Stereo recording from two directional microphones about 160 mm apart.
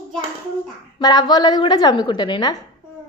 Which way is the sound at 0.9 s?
25° left (ahead or behind).